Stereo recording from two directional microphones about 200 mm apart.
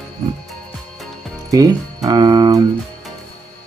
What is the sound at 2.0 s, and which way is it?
Music, 20° right (ahead or behind).